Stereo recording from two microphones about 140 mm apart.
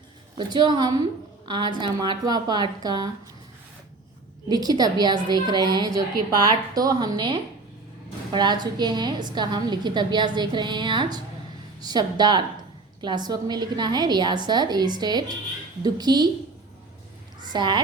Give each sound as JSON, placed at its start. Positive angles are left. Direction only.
{"t": 0.3, "sound": "a woman's voice", "side_deg": -30}
{"t": 4.4, "sound": "a woman's voice", "side_deg": -30}
{"t": 17.4, "sound": "a child's voice", "side_deg": -30}